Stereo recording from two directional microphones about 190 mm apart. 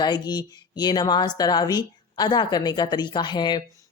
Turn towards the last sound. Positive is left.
turn(degrees=25)  # may be behind; listen again after turning